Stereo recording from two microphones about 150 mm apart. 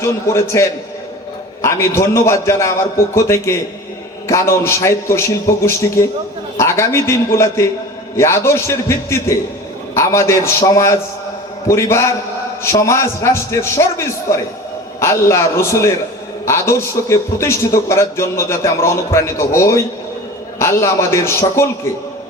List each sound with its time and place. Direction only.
0.0 s speech: 20° left (ahead or behind)
4.6 s a man's voice: 20° left (ahead or behind)